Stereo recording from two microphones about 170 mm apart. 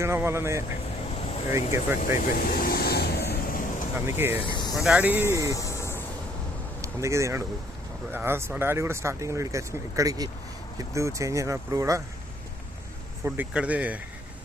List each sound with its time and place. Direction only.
0.0 s speech: 15° right (ahead or behind)
1.0 s vehicle: 35° left (ahead or behind)
2.0 s vehicle: 55° left (ahead or behind)
4.0 s speech: 15° right (ahead or behind)
4.4 s speech: 30° left (ahead or behind)
4.8 s speech: 5° right (ahead or behind)
5.5 s music: 15° left (ahead or behind)
6.8 s speech: 15° right (ahead or behind)
13.2 s speech: 10° right (ahead or behind)